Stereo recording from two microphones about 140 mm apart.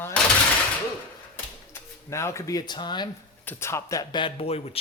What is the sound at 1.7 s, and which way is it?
Speech, 20° left (ahead or behind).